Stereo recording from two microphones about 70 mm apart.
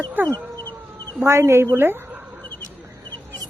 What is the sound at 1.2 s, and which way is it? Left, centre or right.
Speech, right.